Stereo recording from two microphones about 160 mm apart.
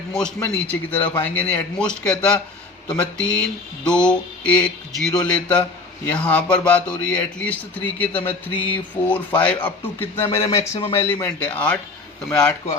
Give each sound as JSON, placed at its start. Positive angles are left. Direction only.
{"t": 0.1, "sound": "mantra", "side_deg": 5}
{"t": 0.3, "sound": "a man's voice", "side_deg": 10}
{"t": 2.9, "sound": "mantra", "side_deg": 5}
{"t": 6.1, "sound": "a man's voice", "side_deg": 10}